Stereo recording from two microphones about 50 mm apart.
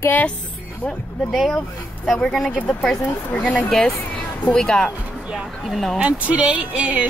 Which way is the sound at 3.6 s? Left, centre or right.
Centre.